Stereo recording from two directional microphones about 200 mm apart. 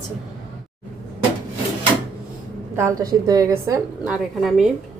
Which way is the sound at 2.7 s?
15° right (ahead or behind).